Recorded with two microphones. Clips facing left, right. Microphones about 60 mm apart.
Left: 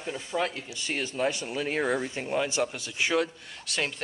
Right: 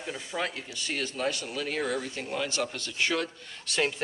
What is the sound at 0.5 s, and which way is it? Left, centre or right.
Speech, centre.